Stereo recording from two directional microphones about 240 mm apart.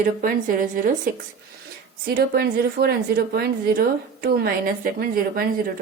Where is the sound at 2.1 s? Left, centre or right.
Right.